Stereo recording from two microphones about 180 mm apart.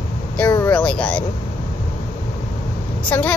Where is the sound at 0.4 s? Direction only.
10° left (ahead or behind).